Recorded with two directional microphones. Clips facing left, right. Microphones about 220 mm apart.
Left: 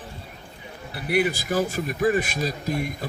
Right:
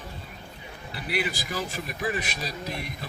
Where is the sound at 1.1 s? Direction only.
50° left (ahead or behind).